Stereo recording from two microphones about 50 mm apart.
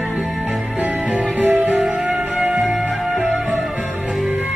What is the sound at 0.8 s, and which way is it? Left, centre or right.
Music, right.